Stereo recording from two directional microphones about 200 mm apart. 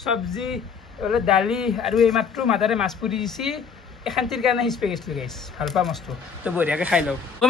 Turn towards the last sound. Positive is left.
turn(degrees=-5)  # may be behind; listen again after turning